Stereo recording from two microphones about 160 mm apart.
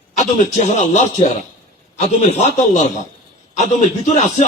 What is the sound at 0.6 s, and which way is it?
A man's voice, 50° left (ahead or behind).